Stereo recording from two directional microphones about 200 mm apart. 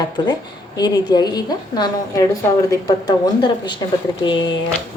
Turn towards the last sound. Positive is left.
turn(degrees=25)  # may be behind; listen again after turning